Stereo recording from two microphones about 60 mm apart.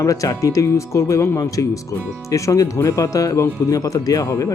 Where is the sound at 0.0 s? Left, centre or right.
Left.